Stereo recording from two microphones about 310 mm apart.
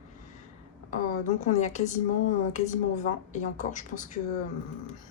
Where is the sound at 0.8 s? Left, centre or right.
Left.